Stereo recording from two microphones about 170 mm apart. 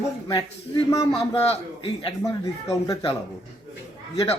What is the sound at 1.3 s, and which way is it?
Speech, 35° left (ahead or behind).